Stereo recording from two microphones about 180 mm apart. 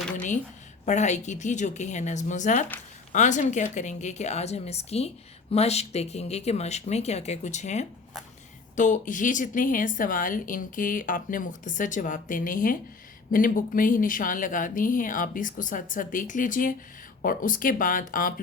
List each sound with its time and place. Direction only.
0.9 s a woman's voice: 40° left (ahead or behind)